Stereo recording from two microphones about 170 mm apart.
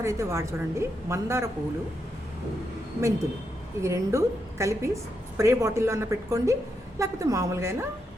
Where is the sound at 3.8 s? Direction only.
15° right (ahead or behind).